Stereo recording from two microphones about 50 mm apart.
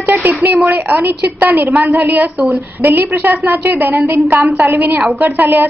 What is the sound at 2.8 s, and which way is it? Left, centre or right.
A woman's voice, right.